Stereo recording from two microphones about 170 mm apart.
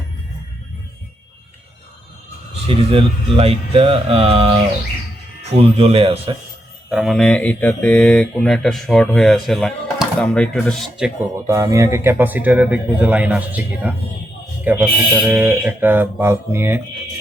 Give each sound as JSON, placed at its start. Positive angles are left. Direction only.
{"t": 2.6, "sound": "speech", "side_deg": -35}
{"t": 6.9, "sound": "speech", "side_deg": 0}
{"t": 11.4, "sound": "speech", "side_deg": -20}